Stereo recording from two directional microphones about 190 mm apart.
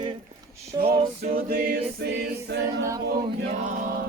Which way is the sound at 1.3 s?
55° right (ahead or behind).